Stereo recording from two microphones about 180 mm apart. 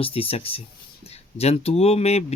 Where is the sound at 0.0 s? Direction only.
30° left (ahead or behind).